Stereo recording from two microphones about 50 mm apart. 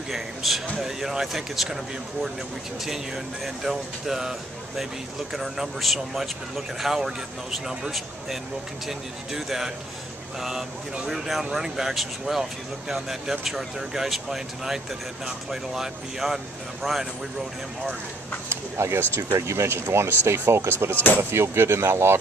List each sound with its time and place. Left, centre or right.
0.1 s speech: centre
3.4 s speech: centre
11.1 s speech: centre
18.5 s speech: right
20.9 s speech: left
21.2 s speech: right